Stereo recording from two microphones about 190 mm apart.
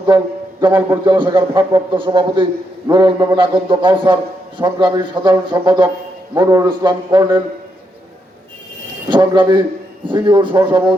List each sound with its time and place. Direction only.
0.1 s a man's voice: 20° right (ahead or behind)
9.0 s a man's voice: 25° right (ahead or behind)